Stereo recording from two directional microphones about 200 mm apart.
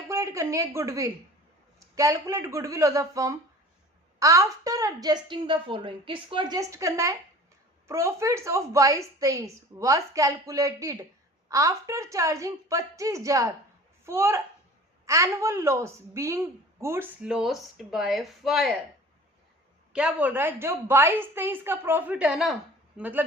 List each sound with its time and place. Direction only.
0.1 s a woman's voice: 15° right (ahead or behind)
19.9 s a woman's voice: 5° right (ahead or behind)